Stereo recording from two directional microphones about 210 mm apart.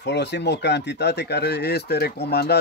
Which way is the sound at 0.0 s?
55° left (ahead or behind).